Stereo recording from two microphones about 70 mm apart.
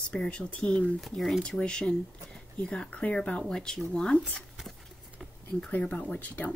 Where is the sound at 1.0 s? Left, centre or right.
Centre.